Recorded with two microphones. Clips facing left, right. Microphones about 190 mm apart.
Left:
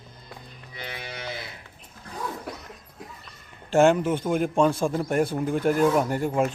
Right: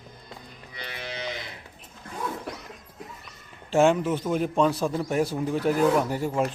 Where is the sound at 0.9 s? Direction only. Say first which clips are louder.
Right 2 dB; 10° left (ahead or behind).